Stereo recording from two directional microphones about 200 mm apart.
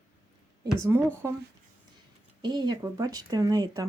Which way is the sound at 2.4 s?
20° right (ahead or behind).